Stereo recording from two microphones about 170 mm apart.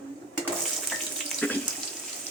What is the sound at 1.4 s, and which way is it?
Water tap, 10° left (ahead or behind).